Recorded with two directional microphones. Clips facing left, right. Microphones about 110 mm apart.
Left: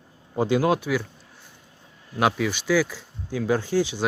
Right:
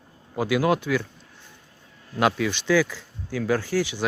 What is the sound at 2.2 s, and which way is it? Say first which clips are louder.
Speech: even; 10° left (ahead or behind).